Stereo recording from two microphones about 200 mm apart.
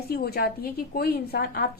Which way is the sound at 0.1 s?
50° left (ahead or behind).